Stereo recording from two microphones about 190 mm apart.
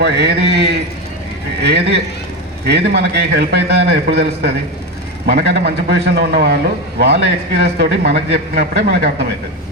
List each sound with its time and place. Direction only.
0.0 s a man's voice: 60° right (ahead or behind)